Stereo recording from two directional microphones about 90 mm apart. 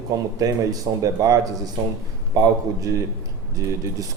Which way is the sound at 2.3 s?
40° right (ahead or behind).